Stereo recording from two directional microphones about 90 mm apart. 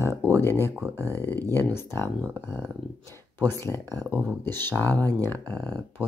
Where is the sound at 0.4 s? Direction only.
25° left (ahead or behind).